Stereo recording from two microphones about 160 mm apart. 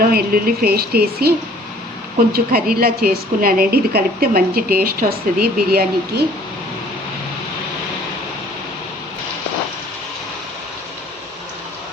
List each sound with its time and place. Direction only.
0.0 s a woman's voice: 70° right (ahead or behind)